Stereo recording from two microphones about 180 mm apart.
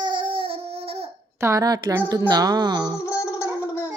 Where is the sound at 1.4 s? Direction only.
15° right (ahead or behind).